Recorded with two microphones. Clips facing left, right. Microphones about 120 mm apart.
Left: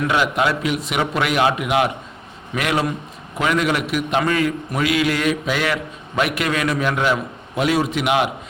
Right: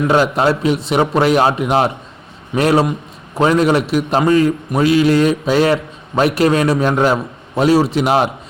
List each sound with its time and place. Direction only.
0.1 s a man's voice: 35° right (ahead or behind)